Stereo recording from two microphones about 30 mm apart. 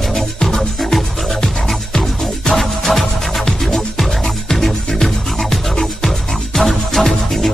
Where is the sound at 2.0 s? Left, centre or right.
Centre.